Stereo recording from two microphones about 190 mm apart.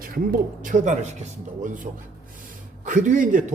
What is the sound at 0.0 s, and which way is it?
Speech, 50° right (ahead or behind).